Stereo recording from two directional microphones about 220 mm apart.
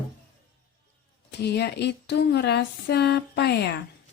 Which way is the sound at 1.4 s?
50° left (ahead or behind).